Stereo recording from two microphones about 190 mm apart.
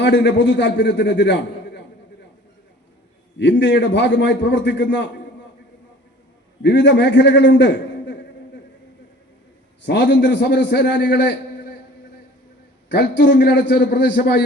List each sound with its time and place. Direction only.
0.0 s a man's voice: 65° left (ahead or behind)
3.3 s a man's voice: 65° left (ahead or behind)
6.6 s a man's voice: 65° left (ahead or behind)
9.8 s a man's voice: 65° left (ahead or behind)
12.9 s a man's voice: 65° left (ahead or behind)